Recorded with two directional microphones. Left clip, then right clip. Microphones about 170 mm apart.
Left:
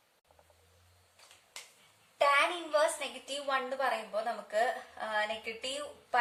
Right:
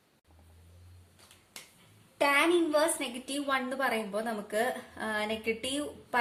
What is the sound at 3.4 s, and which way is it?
A woman's voice, 30° right (ahead or behind).